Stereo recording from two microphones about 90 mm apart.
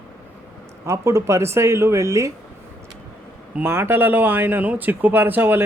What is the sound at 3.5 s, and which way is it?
Speech, 25° right (ahead or behind).